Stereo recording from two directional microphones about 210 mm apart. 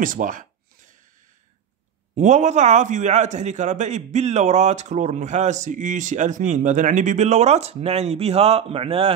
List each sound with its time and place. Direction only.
0.0 s a man's voice: 40° right (ahead or behind)
2.1 s a man's voice: 35° right (ahead or behind)